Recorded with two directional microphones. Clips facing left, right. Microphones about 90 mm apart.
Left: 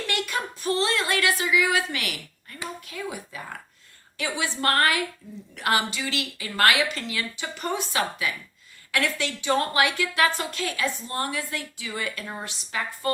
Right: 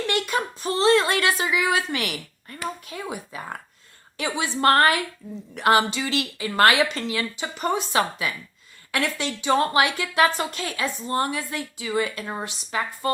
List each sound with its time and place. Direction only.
0.1 s speech: 25° right (ahead or behind)
2.8 s a sound: 25° right (ahead or behind)
4.2 s a woman's voice: 30° right (ahead or behind)